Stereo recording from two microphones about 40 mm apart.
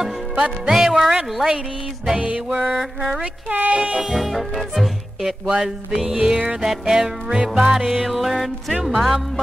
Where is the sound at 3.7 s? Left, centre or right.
Right.